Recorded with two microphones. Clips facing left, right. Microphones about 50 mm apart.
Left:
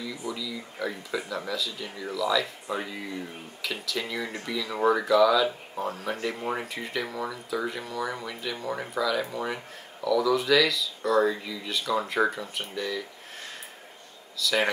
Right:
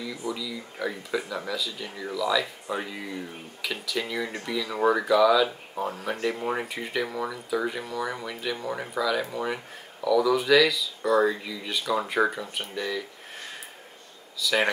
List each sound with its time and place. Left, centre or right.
0.0 s speech: centre
14.4 s speech: centre